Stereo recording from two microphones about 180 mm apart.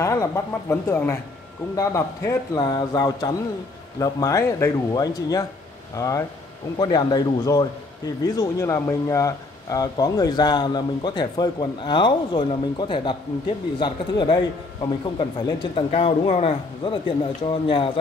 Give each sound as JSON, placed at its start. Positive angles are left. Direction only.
{"t": 0.0, "sound": "speech", "side_deg": 15}